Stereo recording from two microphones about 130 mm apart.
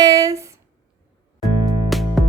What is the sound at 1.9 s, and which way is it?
Music, centre (ahead or behind).